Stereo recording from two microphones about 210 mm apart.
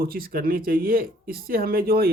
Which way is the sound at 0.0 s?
45° right (ahead or behind).